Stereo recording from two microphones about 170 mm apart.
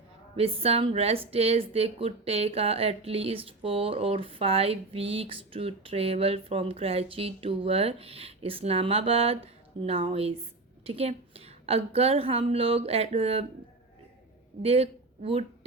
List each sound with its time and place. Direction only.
0.3 s speech: 35° right (ahead or behind)
14.6 s speech: 35° right (ahead or behind)